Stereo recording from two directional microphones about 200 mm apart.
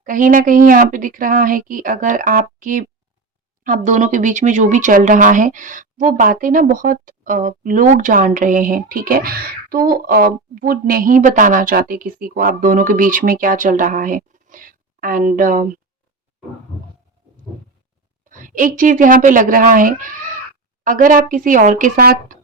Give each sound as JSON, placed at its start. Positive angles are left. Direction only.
{"t": 0.0, "sound": "speech", "side_deg": -40}
{"t": 18.3, "sound": "speech", "side_deg": -40}